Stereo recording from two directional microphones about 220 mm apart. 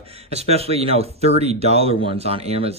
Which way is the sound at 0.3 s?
30° right (ahead or behind).